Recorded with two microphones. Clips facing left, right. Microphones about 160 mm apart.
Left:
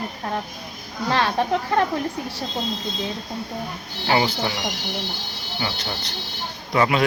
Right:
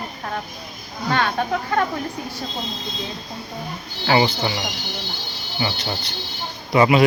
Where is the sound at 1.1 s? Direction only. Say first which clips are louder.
Left 1 dB; 30° left (ahead or behind).